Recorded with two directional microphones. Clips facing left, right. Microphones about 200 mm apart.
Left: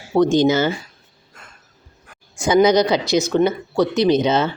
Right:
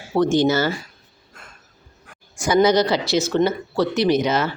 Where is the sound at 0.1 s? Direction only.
15° left (ahead or behind).